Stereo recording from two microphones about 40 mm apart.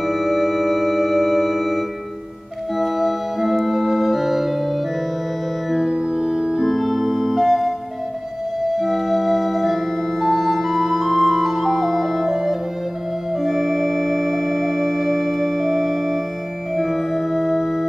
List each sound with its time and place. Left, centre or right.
0.0 s music: centre
2.8 s organ: centre
5.9 s music: centre
6.6 s organ: centre
7.4 s music: centre
8.7 s music: centre
12.3 s music: centre
13.4 s organ: centre
16.7 s music: centre